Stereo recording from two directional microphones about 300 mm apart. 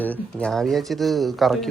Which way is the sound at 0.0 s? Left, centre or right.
Centre.